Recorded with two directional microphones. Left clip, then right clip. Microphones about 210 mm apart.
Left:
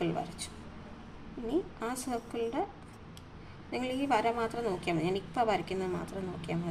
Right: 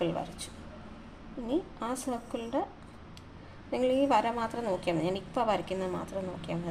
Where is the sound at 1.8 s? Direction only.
10° right (ahead or behind).